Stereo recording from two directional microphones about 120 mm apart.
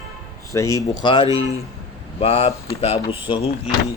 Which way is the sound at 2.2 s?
55° left (ahead or behind).